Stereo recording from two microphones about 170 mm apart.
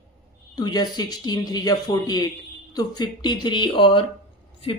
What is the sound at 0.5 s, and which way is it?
A woman's voice, 25° left (ahead or behind).